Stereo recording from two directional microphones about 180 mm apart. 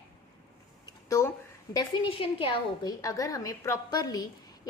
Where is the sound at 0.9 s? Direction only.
15° left (ahead or behind).